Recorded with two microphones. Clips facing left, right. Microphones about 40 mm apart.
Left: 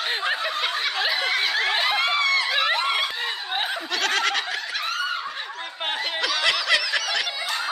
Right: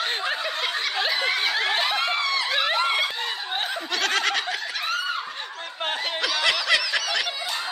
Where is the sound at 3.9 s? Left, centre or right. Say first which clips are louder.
Even; centre.